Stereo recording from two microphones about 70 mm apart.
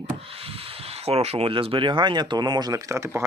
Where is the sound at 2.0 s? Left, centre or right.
Right.